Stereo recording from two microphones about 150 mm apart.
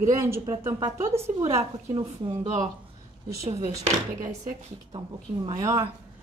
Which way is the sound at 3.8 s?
55° right (ahead or behind).